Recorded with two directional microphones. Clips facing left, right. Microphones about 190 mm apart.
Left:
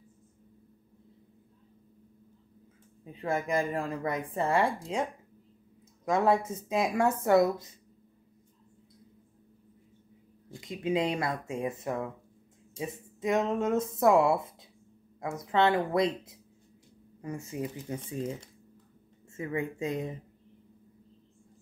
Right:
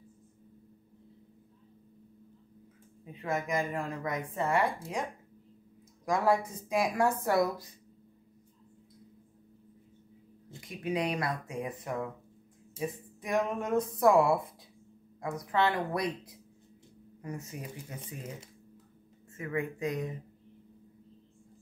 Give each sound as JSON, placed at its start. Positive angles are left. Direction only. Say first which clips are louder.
{"t": 3.2, "sound": "a woman's voice", "louder": "left 3 dB", "side_deg": 30}
{"t": 4.7, "sound": "speech", "louder": "left 4 dB", "side_deg": 20}
{"t": 6.0, "sound": "speech", "louder": "left 2 dB", "side_deg": 25}
{"t": 10.6, "sound": "speech", "louder": "left 3 dB", "side_deg": 25}
{"t": 19.3, "sound": "speech", "louder": "left 1 dB", "side_deg": 25}